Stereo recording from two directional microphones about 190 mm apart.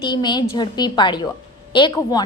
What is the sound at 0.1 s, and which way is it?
A woman's voice, 25° left (ahead or behind).